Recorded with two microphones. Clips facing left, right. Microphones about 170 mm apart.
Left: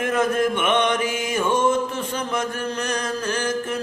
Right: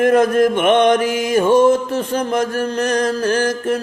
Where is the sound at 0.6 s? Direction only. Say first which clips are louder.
Right 8 dB; 55° right (ahead or behind).